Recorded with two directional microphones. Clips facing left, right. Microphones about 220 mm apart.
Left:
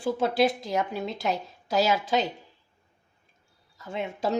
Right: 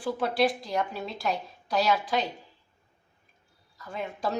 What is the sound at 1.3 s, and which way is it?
Speech, 25° left (ahead or behind).